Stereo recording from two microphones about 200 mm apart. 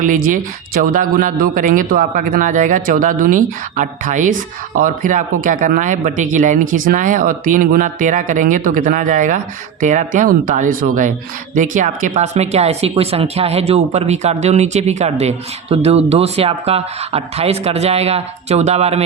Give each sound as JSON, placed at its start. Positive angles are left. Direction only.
{"t": 0.0, "sound": "speech", "side_deg": -40}